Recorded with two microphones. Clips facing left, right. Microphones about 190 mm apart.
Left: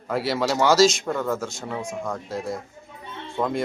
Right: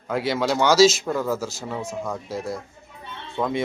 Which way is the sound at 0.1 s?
Centre (ahead or behind).